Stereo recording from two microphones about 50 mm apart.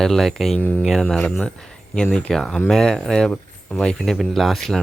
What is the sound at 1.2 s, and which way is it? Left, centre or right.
Speech, left.